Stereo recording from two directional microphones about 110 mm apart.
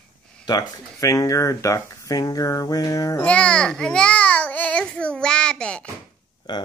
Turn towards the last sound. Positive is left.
turn(degrees=40)  # may be behind; listen again after turning